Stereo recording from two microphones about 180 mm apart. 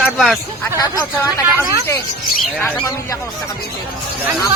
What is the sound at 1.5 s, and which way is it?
Speech, 20° right (ahead or behind).